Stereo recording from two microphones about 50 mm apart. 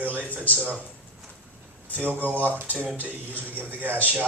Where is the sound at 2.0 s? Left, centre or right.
Right.